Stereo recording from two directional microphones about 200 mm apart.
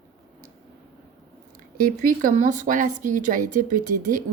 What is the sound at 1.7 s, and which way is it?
A woman's voice, 45° right (ahead or behind).